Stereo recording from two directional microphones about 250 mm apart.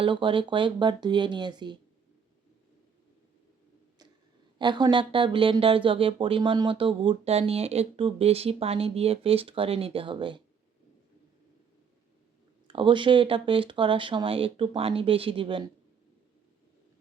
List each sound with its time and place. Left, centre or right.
0.0 s speech: centre
4.5 s speech: centre
12.6 s speech: centre